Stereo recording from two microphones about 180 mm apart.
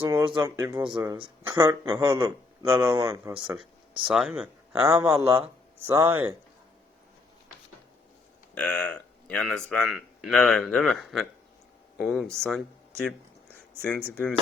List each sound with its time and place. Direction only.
0.0 s a sound: 15° right (ahead or behind)
0.3 s a man's voice: 25° right (ahead or behind)
3.4 s speech: 5° right (ahead or behind)
4.7 s speech: 15° right (ahead or behind)
8.5 s speech: 5° left (ahead or behind)